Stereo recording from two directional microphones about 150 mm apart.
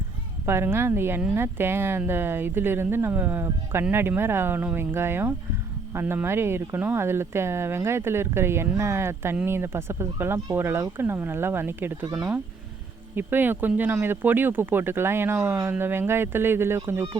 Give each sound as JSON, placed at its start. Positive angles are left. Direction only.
{"t": 0.4, "sound": "speech", "side_deg": -15}